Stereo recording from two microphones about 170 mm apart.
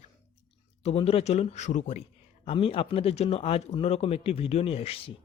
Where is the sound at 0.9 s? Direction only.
35° left (ahead or behind).